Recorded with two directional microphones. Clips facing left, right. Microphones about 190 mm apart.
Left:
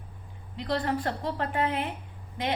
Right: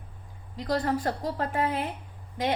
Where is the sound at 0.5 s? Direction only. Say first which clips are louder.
Right 2 dB; 40° right (ahead or behind).